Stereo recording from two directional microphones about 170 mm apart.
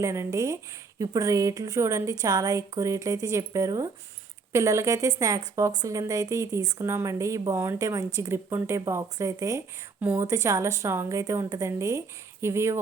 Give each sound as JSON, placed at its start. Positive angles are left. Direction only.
{"t": 0.0, "sound": "a woman's voice", "side_deg": -15}